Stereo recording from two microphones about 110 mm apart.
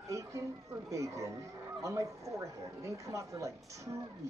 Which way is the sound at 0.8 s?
30° right (ahead or behind).